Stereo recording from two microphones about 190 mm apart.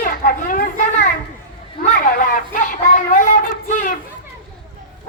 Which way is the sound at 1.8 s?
45° left (ahead or behind).